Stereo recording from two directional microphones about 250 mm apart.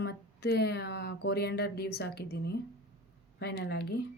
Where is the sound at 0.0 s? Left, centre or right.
Left.